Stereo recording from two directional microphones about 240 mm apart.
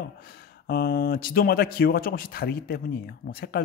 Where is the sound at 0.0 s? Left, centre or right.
Left.